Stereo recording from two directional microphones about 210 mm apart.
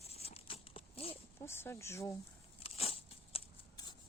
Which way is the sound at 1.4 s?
10° left (ahead or behind).